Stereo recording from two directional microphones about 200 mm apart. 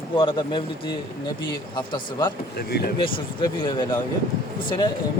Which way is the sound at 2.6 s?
55° left (ahead or behind).